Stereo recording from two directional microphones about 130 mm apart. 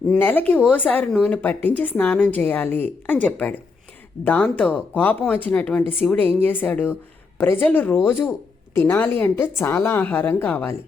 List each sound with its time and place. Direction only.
0.1 s speech: 15° left (ahead or behind)